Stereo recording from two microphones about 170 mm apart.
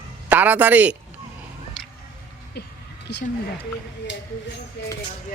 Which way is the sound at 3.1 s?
90° left.